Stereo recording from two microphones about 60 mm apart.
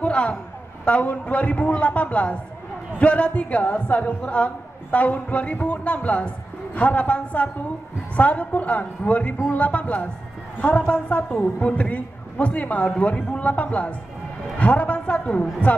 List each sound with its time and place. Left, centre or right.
0.0 s a man's voice: centre